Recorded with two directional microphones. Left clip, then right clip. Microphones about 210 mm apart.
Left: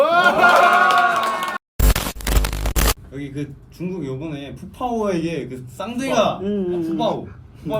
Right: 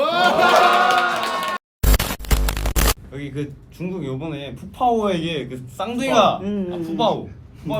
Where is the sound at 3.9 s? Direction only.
55° right (ahead or behind).